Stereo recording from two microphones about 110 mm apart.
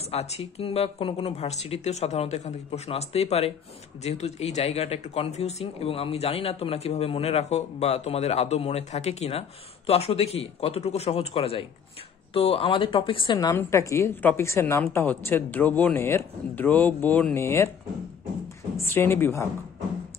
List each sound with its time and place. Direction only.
0.1 s speech: 75° left (ahead or behind); by 13.5 s 45° left (ahead or behind)
13.6 s a woman's voice: 25° left (ahead or behind)
18.8 s a woman's voice: 25° left (ahead or behind)